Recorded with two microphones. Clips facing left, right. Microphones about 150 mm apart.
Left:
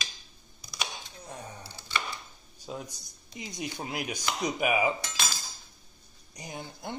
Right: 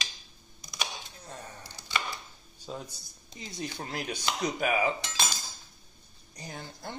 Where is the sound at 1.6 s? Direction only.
15° right (ahead or behind).